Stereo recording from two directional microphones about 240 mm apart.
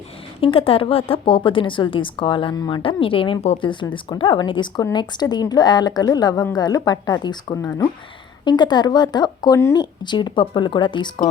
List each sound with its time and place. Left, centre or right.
0.3 s a woman's voice: left